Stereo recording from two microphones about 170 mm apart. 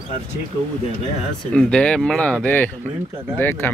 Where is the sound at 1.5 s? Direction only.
5° left (ahead or behind).